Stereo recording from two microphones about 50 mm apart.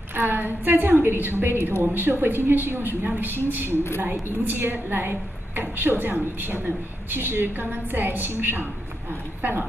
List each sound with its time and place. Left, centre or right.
0.1 s a woman's voice: right